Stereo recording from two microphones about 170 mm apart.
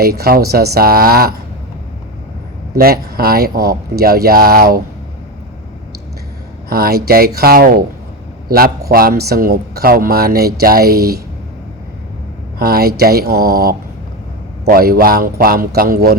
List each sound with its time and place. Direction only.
0.0 s speech: 65° right (ahead or behind)
2.7 s speech: 60° right (ahead or behind)
6.7 s speech: 65° right (ahead or behind)
12.5 s speech: 60° right (ahead or behind)